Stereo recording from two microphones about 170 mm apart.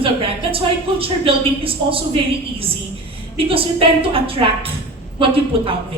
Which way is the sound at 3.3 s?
35° right (ahead or behind).